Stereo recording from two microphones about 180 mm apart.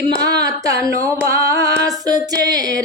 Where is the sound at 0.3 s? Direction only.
20° right (ahead or behind).